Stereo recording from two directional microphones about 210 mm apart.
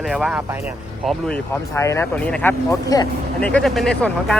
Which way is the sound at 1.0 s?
10° left (ahead or behind).